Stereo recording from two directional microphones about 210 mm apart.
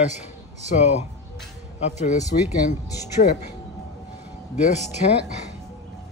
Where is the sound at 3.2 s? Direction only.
45° left (ahead or behind).